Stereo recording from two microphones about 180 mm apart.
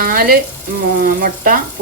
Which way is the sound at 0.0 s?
55° right (ahead or behind).